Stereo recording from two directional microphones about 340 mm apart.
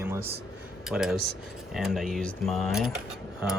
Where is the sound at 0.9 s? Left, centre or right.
Centre.